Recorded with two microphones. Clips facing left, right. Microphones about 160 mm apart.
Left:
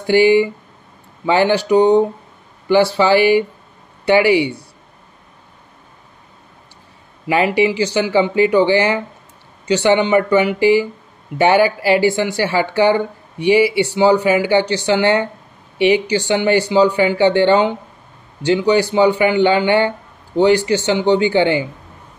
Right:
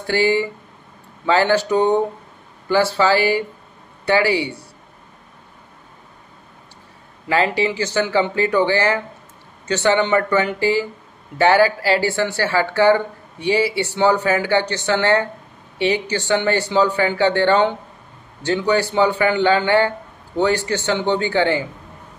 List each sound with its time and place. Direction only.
0.0 s speech: 15° left (ahead or behind)
7.2 s speech: 15° left (ahead or behind)